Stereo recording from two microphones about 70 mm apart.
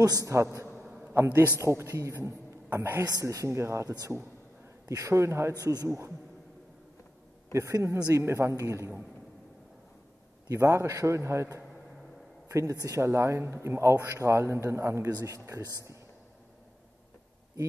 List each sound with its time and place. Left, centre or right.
0.0 s speech: right
0.8 s a sound: centre
1.1 s a man's voice: right
3.0 s a man's voice: right
7.5 s a man's voice: right
10.5 s a man's voice: right
12.4 s a sound: right
12.8 s speech: right
13.9 s a man's voice: right
14.2 s a man's voice: right
15.0 s speech: right